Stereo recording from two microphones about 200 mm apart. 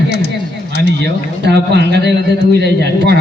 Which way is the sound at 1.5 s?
55° right (ahead or behind).